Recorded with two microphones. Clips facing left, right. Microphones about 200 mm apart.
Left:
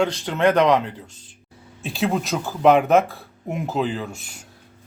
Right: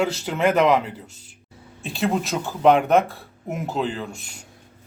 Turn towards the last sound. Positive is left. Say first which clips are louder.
# left 2 dB
turn(degrees=5)  # may be behind; listen again after turning